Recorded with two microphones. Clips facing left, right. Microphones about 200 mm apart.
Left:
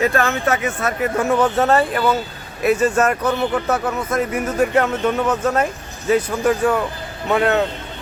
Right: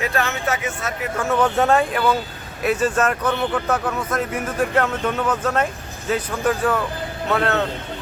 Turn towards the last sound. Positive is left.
turn(degrees=15)  # may be behind; listen again after turning